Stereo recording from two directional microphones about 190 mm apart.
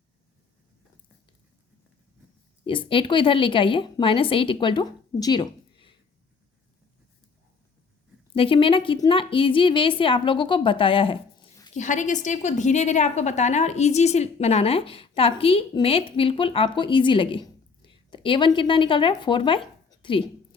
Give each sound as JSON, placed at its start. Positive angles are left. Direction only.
{"t": 2.6, "sound": "a woman's voice", "side_deg": 25}
{"t": 8.3, "sound": "a woman's voice", "side_deg": 30}
{"t": 11.7, "sound": "a woman's voice", "side_deg": 40}